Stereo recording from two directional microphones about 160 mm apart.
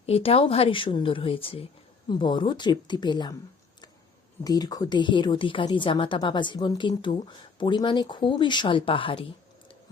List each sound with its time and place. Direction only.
0.0 s a woman's voice: 40° left (ahead or behind)
4.4 s a woman's voice: 25° left (ahead or behind)